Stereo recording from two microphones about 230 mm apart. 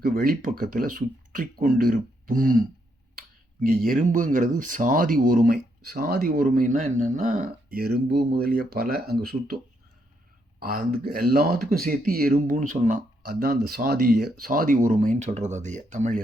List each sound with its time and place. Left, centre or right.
0.0 s speech: right
10.6 s speech: right